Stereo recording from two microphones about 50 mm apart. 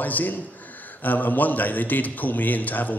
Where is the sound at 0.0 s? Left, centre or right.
Left.